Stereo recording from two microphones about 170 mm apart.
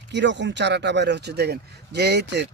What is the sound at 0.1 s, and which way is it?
Speech, 90° right.